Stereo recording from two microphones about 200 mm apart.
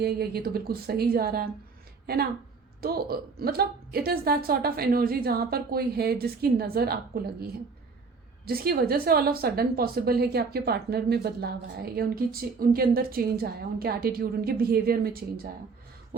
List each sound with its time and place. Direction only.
0.0 s a woman's voice: 50° right (ahead or behind)